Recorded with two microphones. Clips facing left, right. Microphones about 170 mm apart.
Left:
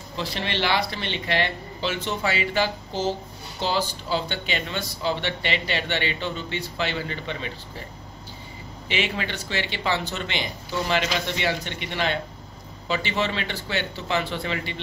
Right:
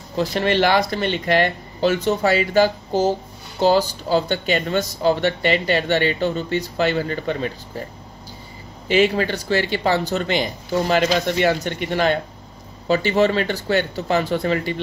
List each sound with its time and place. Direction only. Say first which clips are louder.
0.1 s speech: right 10 dB; 45° right (ahead or behind)
8.8 s speech: right 10 dB; 40° right (ahead or behind)